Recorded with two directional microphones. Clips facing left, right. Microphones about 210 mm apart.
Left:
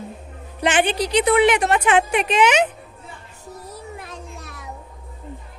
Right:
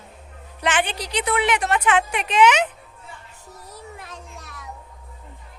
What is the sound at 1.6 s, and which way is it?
Speech, 30° left (ahead or behind).